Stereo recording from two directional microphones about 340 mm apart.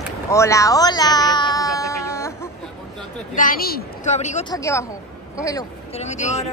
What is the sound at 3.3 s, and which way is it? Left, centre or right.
A woman's voice, left.